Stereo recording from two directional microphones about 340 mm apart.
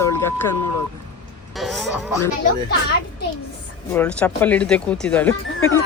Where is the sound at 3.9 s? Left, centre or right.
Centre.